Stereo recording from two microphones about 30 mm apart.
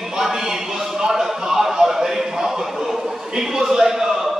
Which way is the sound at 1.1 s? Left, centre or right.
Centre.